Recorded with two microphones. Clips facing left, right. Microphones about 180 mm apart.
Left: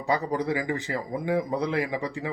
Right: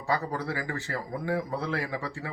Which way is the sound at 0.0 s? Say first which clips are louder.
Left 4 dB; 20° left (ahead or behind).